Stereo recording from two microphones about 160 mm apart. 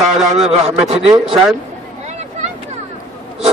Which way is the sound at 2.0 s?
45° right (ahead or behind).